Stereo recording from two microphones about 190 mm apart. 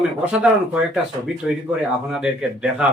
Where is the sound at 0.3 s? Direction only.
5° right (ahead or behind).